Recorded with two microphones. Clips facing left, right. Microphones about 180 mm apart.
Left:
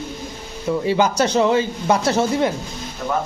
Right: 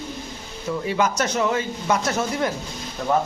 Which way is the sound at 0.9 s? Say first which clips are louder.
Left 4 dB; 30° left (ahead or behind).